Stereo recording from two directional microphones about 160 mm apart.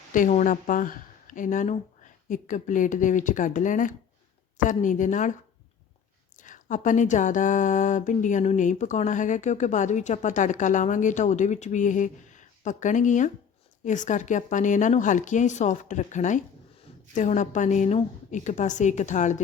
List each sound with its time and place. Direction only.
0.1 s speech: 50° left (ahead or behind)